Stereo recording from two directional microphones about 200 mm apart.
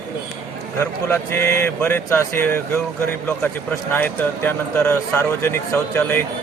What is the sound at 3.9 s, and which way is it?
Speech, 10° left (ahead or behind).